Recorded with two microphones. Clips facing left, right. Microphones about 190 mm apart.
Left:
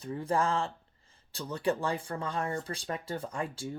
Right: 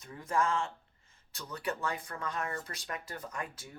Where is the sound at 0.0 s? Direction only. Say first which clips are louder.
Left 3 dB; 30° left (ahead or behind).